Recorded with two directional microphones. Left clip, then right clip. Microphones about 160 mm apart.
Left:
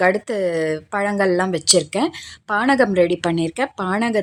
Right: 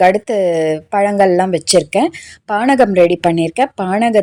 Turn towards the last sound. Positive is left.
turn(degrees=-15)  # may be behind; listen again after turning